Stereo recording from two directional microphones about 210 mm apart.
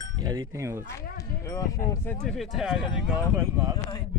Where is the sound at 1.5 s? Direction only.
15° left (ahead or behind).